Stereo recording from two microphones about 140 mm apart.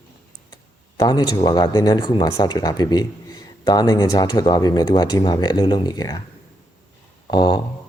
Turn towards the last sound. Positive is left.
turn(degrees=30)  # may be behind; listen again after turning